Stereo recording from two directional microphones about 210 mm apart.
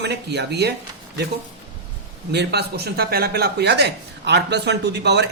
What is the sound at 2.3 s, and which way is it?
A woman's voice, 50° right (ahead or behind).